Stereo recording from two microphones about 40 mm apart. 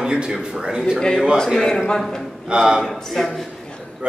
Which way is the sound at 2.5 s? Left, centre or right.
Centre.